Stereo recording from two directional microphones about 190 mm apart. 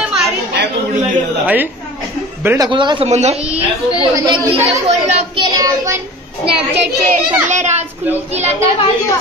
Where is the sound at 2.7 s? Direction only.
25° right (ahead or behind).